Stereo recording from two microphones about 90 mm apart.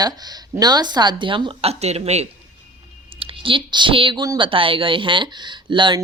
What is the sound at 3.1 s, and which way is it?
Speech, 85° right.